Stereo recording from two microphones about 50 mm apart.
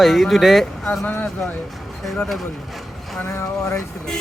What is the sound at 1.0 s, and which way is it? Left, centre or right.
Speech, left.